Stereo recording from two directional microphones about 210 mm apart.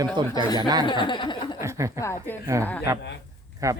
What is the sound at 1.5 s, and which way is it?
Chuckle, 15° right (ahead or behind).